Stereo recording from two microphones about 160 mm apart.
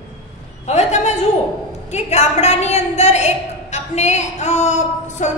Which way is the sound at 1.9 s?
45° left (ahead or behind).